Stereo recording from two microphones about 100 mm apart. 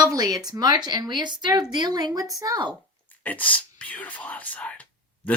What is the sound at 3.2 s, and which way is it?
Speech, 15° left (ahead or behind).